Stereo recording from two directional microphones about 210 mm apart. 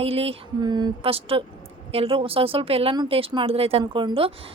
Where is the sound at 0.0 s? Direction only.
30° right (ahead or behind).